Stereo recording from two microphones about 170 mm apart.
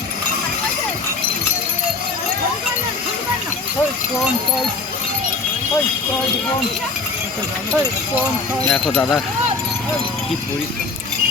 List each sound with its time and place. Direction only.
8.7 s speech: 5° left (ahead or behind)